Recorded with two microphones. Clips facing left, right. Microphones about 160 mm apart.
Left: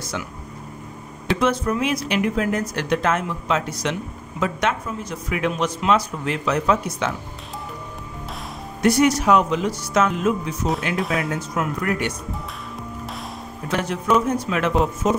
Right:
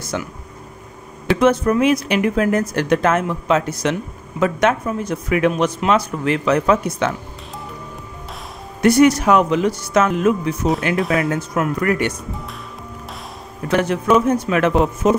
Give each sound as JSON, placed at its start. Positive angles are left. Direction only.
{"t": 0.1, "sound": "speech", "side_deg": -50}
{"t": 1.3, "sound": "speech", "side_deg": -55}
{"t": 8.8, "sound": "speech", "side_deg": -60}
{"t": 11.0, "sound": "speech", "side_deg": 0}
{"t": 11.2, "sound": "speech", "side_deg": -55}
{"t": 13.7, "sound": "speech", "side_deg": -60}